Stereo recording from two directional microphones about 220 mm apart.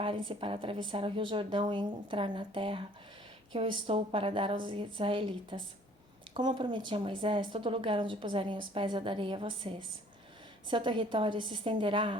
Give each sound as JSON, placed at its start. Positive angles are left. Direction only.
{"t": 0.0, "sound": "a woman's voice", "side_deg": -25}